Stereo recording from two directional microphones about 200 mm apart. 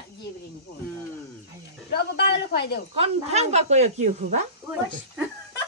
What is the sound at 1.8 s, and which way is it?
Speech, 55° left (ahead or behind).